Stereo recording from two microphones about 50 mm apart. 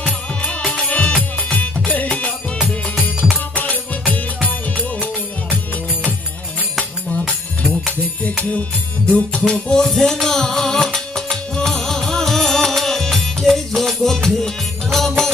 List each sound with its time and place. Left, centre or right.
0.0 s music: left
1.5 s music: left
3.5 s music: left
7.3 s music: centre
9.0 s music: left
9.5 s music: centre